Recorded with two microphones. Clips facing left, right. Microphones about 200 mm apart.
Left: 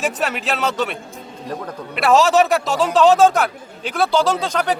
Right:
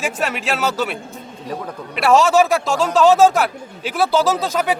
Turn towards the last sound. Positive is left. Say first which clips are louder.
# right 1 dB
turn(degrees=-5)  # may be behind; listen again after turning